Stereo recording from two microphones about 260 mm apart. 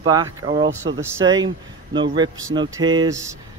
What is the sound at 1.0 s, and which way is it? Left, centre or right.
A man's voice, centre.